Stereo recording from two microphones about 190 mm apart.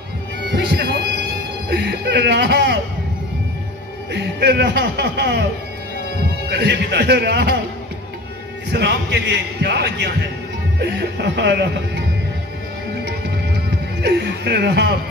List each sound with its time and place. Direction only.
0.5 s a man's voice: 60° right (ahead or behind)
4.1 s a man's voice: 65° right (ahead or behind)
6.5 s a man's voice: 65° right (ahead or behind)
8.7 s a man's voice: 65° right (ahead or behind)
14.0 s a man's voice: 60° right (ahead or behind)